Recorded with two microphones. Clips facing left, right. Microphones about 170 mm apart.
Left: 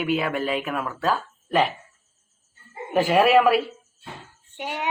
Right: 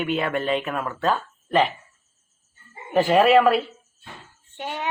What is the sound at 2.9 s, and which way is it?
A child's voice, 5° left (ahead or behind).